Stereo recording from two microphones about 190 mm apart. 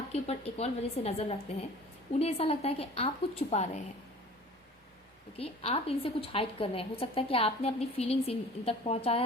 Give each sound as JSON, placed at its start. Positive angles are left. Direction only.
{"t": 0.1, "sound": "a woman's voice", "side_deg": 35}
{"t": 5.4, "sound": "a woman's voice", "side_deg": 30}